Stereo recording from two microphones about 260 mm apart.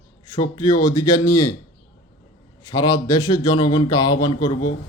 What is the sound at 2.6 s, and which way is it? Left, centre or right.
Speech, centre.